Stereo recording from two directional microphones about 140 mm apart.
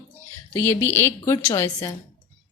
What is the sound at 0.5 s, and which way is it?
A woman's voice, 15° left (ahead or behind).